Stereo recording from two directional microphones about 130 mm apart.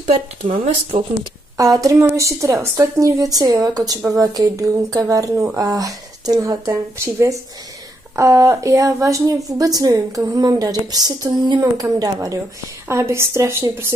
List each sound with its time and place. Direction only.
1.6 s a woman's voice: 25° right (ahead or behind)